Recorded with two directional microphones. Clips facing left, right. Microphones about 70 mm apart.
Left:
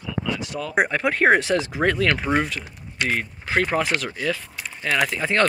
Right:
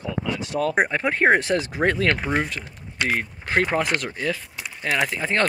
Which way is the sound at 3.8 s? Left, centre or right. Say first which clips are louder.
Even; right.